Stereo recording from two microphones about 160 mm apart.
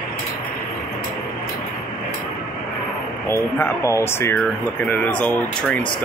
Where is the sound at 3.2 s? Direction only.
15° left (ahead or behind).